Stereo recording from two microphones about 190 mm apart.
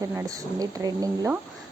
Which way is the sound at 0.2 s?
20° right (ahead or behind).